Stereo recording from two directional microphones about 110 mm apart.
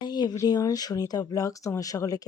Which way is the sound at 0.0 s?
40° left (ahead or behind).